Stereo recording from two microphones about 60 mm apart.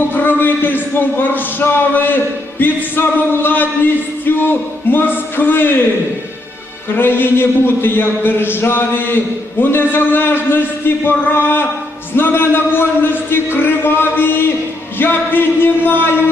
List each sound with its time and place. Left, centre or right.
0.1 s a man's voice: left
6.9 s a man's voice: left